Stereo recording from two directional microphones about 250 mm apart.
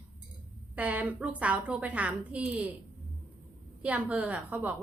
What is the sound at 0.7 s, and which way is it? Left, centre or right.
A woman's voice, centre.